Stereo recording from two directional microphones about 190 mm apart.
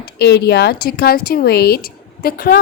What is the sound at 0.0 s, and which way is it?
Speech, 60° left (ahead or behind).